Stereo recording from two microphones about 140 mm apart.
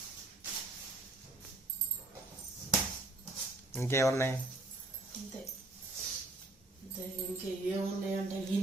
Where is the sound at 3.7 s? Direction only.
20° left (ahead or behind).